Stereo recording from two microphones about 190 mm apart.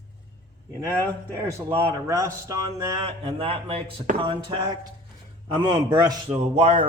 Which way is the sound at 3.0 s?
30° right (ahead or behind).